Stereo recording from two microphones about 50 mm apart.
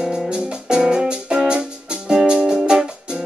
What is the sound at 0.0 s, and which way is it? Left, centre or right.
Music, centre.